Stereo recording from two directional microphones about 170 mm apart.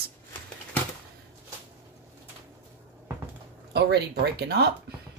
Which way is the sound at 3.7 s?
75° right (ahead or behind).